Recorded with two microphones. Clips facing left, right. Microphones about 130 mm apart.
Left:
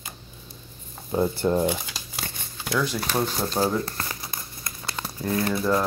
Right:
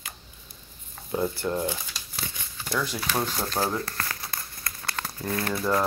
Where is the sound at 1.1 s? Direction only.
25° left (ahead or behind).